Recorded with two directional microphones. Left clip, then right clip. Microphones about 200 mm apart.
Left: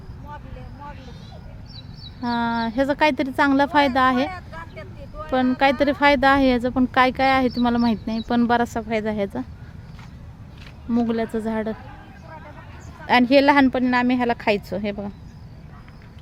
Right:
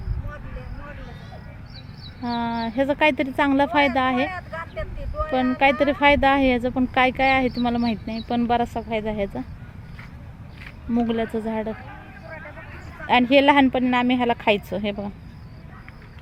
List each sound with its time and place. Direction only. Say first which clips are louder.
2.3 s speech: left 2 dB; 15° left (ahead or behind)
4.5 s vehicle: right 5 dB; 45° left (ahead or behind)
5.3 s a woman's voice: left 1 dB; 15° left (ahead or behind)
10.9 s speech: left 1 dB; 10° left (ahead or behind)
13.1 s speech: left 1 dB; 10° left (ahead or behind)